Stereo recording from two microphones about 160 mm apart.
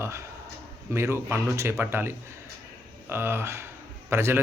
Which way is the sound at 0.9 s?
15° right (ahead or behind).